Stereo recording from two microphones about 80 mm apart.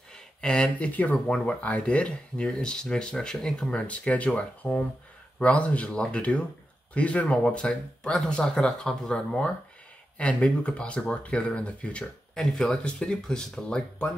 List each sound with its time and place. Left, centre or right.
0.1 s speech: centre